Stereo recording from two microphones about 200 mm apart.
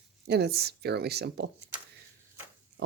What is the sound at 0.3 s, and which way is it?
Speech, 55° right (ahead or behind).